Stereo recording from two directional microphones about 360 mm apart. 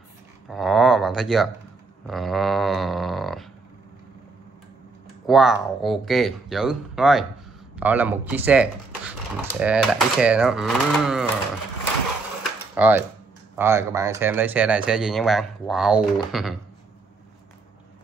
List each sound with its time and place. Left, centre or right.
0.5 s speech: centre
5.2 s speech: centre
12.7 s speech: centre